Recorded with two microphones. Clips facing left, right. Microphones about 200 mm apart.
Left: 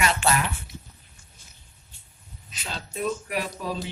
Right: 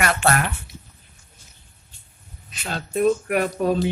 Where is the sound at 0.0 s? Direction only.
55° right (ahead or behind).